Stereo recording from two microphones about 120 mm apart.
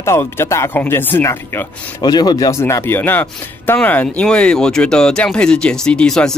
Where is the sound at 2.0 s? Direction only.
35° left (ahead or behind).